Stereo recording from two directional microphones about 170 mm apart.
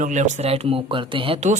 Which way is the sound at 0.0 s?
45° right (ahead or behind).